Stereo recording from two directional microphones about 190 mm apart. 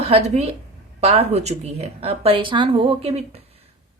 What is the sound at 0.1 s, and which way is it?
A woman's voice, 30° right (ahead or behind).